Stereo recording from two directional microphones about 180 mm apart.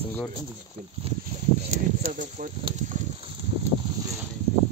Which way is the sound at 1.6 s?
45° right (ahead or behind).